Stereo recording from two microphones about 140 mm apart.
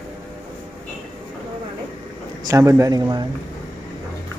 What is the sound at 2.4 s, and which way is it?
Speech, 25° right (ahead or behind).